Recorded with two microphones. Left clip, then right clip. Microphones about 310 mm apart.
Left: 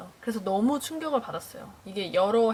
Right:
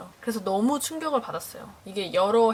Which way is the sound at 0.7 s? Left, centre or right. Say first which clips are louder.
Right 2 dB; centre.